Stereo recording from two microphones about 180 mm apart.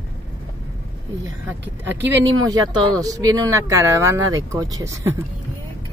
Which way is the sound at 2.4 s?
20° right (ahead or behind).